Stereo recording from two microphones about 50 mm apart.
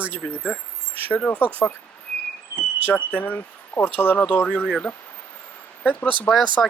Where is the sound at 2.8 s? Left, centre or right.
Left.